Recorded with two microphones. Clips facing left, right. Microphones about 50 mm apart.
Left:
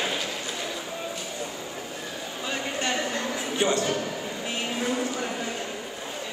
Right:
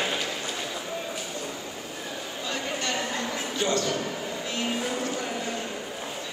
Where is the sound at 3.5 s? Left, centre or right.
Left.